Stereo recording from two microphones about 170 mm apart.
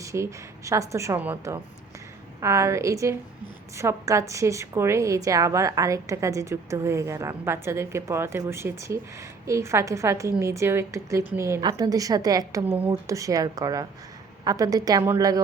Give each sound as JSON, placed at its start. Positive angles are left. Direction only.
{"t": 0.0, "sound": "a woman's voice", "side_deg": -20}